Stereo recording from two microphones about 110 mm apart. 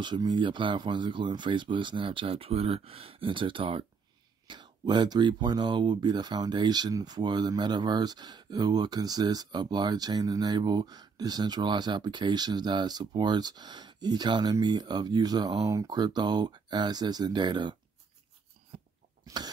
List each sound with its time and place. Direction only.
0.0 s speech: 45° right (ahead or behind)
18.7 s cough: 85° right
19.2 s cough: 35° right (ahead or behind)